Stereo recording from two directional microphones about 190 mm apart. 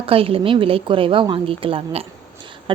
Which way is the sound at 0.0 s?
30° right (ahead or behind).